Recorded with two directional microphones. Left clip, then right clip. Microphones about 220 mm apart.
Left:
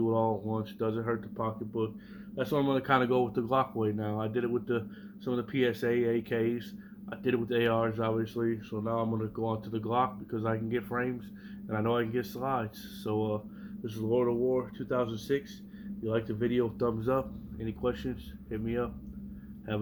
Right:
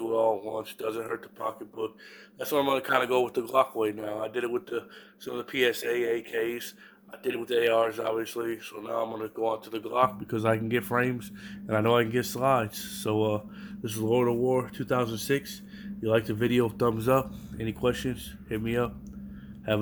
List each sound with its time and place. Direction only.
0.0 s speech: 45° right (ahead or behind)